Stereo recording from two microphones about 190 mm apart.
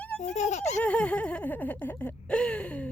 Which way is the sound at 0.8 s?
5° left (ahead or behind).